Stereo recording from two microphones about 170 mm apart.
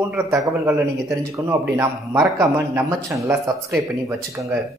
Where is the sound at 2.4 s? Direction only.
15° right (ahead or behind).